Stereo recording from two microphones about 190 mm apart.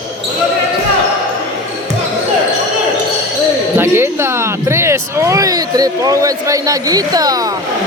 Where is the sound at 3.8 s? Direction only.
10° right (ahead or behind).